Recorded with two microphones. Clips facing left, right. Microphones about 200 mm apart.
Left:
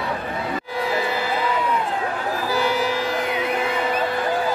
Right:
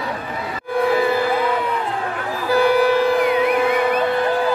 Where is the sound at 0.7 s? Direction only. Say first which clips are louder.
Right 8 dB; 55° right (ahead or behind).